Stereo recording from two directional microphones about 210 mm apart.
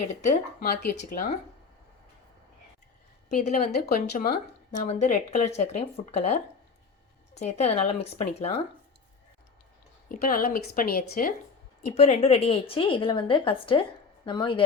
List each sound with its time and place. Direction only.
0.2 s speech: 40° left (ahead or behind)
3.2 s a woman's voice: 35° left (ahead or behind)
7.3 s a woman's voice: 30° left (ahead or behind)
10.1 s speech: 40° left (ahead or behind)
11.8 s a woman's voice: 30° left (ahead or behind)